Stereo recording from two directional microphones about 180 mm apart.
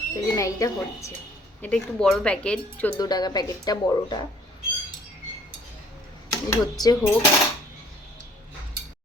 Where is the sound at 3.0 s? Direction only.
25° left (ahead or behind).